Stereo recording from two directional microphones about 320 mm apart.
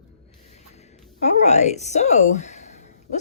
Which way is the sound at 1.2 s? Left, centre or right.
Left.